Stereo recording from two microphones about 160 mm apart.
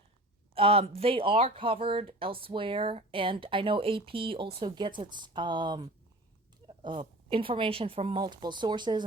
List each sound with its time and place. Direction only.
0.5 s speech: 35° right (ahead or behind)
6.8 s speech: 30° right (ahead or behind)